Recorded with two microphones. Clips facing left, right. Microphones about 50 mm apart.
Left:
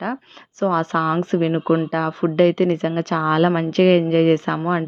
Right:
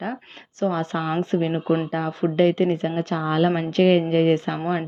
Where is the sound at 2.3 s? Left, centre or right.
Left.